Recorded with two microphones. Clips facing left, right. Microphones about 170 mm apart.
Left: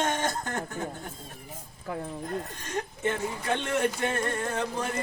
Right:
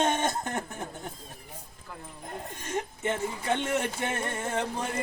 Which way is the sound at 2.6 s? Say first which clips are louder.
Right 1 dB; 20° right (ahead or behind).